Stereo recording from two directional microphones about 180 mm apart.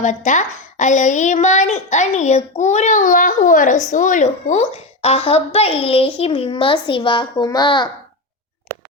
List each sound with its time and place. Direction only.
0.3 s a child's voice: 45° left (ahead or behind); by 7.9 s 25° left (ahead or behind)